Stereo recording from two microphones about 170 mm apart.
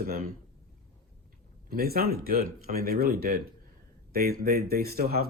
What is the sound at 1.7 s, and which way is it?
Speech, 60° right (ahead or behind).